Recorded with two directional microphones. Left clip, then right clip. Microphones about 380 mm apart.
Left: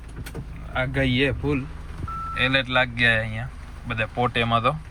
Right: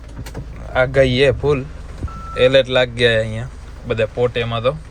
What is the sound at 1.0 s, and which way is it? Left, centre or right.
Speech, right.